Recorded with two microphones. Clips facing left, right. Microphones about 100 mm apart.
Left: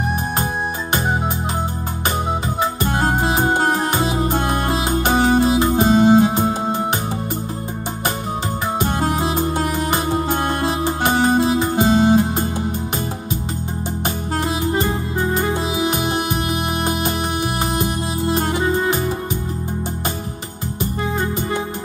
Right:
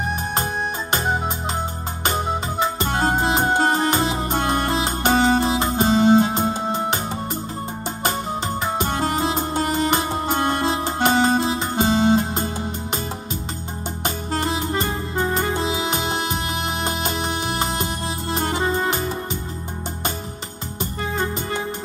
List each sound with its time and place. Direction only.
3.0 s music: 15° left (ahead or behind)
8.9 s music: 15° left (ahead or behind)
10.7 s music: 15° left (ahead or behind)